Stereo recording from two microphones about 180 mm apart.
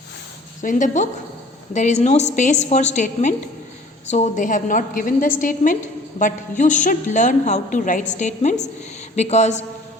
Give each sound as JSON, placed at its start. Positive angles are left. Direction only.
{"t": 0.6, "sound": "a woman's voice", "side_deg": 45}